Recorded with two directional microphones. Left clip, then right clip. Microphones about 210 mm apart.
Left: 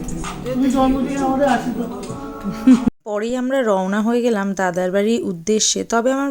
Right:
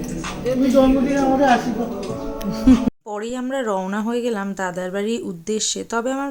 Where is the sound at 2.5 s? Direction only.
20° left (ahead or behind).